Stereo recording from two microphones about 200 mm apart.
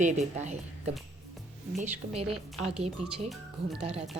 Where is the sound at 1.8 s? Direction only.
30° right (ahead or behind).